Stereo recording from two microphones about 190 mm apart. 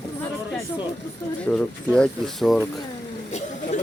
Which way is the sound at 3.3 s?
35° left (ahead or behind).